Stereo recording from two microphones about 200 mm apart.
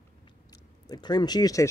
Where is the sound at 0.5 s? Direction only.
20° left (ahead or behind).